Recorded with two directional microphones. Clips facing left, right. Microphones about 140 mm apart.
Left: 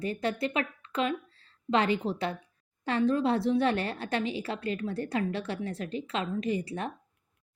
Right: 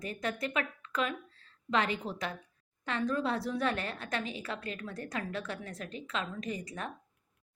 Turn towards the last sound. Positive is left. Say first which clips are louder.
# left 7 dB
turn(degrees=30)  # may be behind; listen again after turning